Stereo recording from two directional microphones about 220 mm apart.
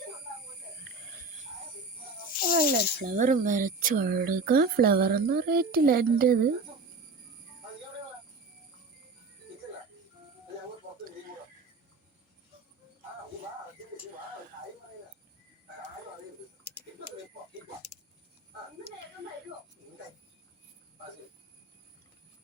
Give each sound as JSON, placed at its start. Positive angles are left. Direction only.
{"t": 2.5, "sound": "speech", "side_deg": -35}